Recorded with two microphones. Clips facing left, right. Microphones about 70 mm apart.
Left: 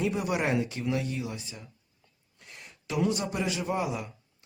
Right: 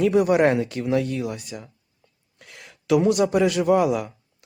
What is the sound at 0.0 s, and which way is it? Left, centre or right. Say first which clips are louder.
Speech: right 11 dB; right.